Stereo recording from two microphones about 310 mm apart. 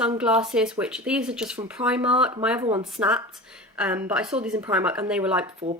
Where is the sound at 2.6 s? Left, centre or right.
Centre.